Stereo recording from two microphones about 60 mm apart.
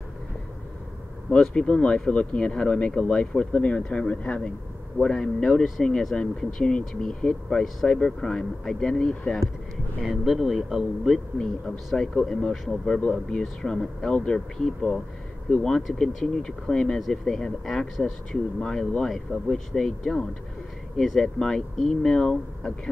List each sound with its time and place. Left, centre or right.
1.3 s speech: centre
10.0 s a man's voice: centre
11.3 s speech: centre